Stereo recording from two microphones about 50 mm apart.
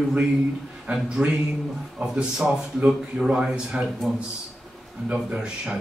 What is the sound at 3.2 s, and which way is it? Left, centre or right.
A man's voice, centre.